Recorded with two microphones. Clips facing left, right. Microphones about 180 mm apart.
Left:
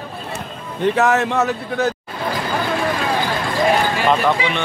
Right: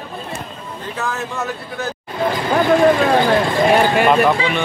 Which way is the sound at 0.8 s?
75° left (ahead or behind).